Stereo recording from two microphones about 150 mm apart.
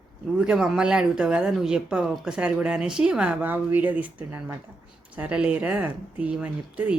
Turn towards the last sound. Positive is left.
turn(degrees=-10)  # may be behind; listen again after turning